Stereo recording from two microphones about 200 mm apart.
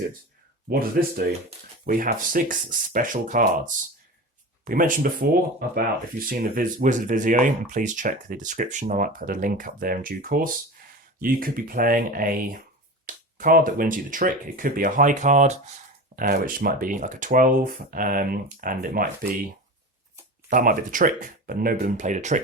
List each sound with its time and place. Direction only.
0.7 s speech: 45° right (ahead or behind)
4.6 s speech: 45° right (ahead or behind)
16.1 s speech: 45° right (ahead or behind)
20.5 s speech: 40° right (ahead or behind)